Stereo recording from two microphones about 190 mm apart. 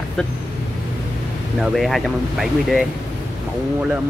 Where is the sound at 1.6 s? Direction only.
Centre (ahead or behind).